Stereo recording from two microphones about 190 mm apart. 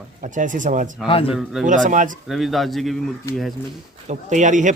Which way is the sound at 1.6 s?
45° right (ahead or behind).